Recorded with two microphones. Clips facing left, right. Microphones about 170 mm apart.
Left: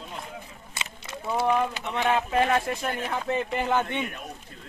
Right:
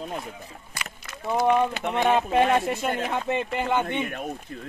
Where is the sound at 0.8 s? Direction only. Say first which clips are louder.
Even; 25° left (ahead or behind).